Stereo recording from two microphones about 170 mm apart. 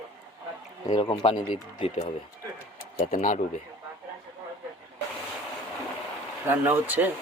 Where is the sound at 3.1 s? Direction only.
50° left (ahead or behind).